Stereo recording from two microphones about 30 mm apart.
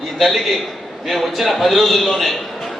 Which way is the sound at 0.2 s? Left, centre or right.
Centre.